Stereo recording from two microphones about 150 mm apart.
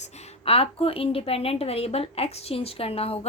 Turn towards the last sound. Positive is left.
turn(degrees=40)  # may be behind; listen again after turning